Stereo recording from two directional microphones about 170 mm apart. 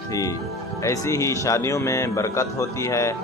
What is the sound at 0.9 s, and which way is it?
Speech, 20° left (ahead or behind).